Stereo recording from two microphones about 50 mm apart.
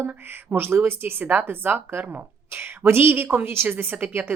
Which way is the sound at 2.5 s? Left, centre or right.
Right.